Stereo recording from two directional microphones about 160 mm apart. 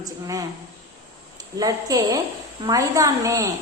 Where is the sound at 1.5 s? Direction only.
20° right (ahead or behind).